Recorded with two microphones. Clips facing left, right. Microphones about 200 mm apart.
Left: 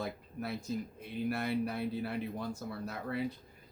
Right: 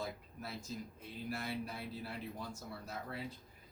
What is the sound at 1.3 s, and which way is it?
Speech, 60° left (ahead or behind).